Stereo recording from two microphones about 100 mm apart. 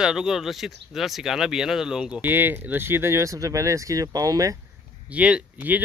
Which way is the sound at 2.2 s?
20° right (ahead or behind).